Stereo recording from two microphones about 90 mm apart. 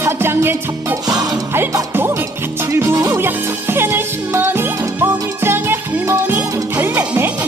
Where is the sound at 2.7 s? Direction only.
30° right (ahead or behind).